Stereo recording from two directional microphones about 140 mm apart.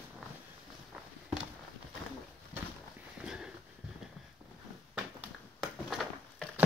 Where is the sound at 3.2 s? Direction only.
5° right (ahead or behind).